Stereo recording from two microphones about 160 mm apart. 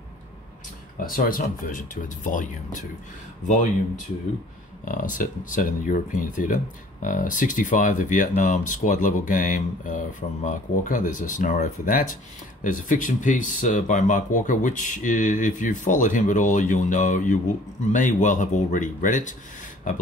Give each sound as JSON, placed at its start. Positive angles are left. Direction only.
{"t": 0.9, "sound": "speech", "side_deg": 65}
{"t": 4.8, "sound": "speech", "side_deg": 55}